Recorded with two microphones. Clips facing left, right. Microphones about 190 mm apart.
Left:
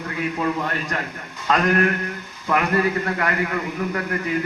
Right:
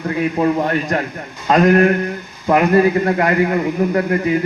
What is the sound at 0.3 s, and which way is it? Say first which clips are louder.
A man's voice: right 8 dB; 35° right (ahead or behind).